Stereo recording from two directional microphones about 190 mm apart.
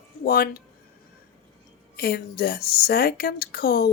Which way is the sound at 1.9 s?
55° left (ahead or behind).